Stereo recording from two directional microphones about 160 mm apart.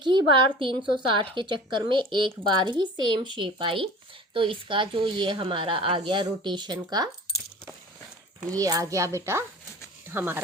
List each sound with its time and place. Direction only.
0.0 s a woman's voice: 30° right (ahead or behind)
7.3 s coin: 30° left (ahead or behind)
8.4 s speech: 20° right (ahead or behind)